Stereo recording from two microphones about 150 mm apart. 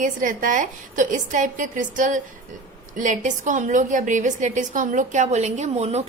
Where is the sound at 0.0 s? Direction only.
60° right (ahead or behind).